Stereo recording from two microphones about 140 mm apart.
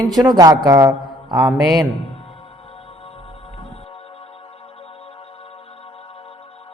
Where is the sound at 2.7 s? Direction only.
45° left (ahead or behind).